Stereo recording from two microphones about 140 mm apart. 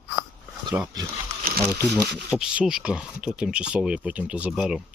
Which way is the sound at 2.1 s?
5° right (ahead or behind).